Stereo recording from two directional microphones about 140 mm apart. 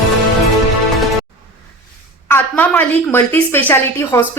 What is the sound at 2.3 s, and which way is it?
A woman's voice, 15° left (ahead or behind).